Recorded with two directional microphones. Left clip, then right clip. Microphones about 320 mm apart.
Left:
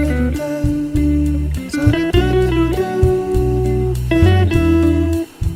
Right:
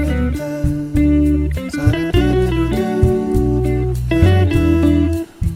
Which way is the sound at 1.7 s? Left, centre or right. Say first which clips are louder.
Left 3 dB; centre.